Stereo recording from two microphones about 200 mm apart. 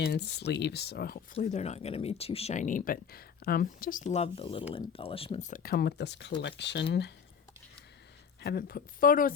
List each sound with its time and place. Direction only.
0.0 s speech: 55° left (ahead or behind)
8.4 s speech: 50° left (ahead or behind)